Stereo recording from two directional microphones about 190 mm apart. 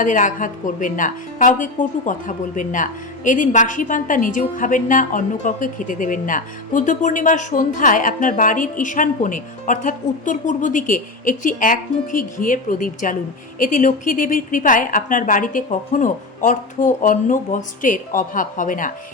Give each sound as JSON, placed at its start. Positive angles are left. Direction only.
{"t": 0.0, "sound": "a woman's voice", "side_deg": 45}